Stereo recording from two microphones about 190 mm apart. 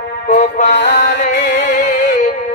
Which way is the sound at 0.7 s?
65° left (ahead or behind).